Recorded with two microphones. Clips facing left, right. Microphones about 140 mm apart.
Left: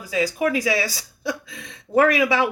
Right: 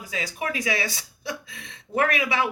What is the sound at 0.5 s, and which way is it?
Speech, 40° left (ahead or behind).